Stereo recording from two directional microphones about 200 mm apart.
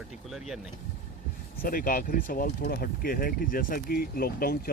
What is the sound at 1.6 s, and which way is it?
Speech, 45° left (ahead or behind).